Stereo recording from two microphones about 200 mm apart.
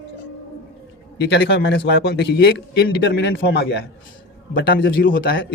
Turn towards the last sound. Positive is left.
turn(degrees=45)  # may be behind; listen again after turning